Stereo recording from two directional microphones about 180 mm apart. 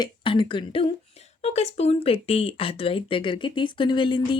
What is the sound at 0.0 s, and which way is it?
Speech, 30° left (ahead or behind).